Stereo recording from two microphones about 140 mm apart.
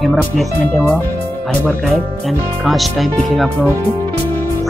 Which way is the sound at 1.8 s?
Centre (ahead or behind).